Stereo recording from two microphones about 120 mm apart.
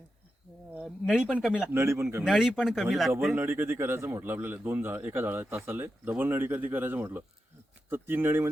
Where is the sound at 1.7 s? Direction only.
20° right (ahead or behind).